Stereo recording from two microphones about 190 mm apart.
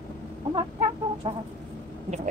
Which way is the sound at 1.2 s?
30° right (ahead or behind).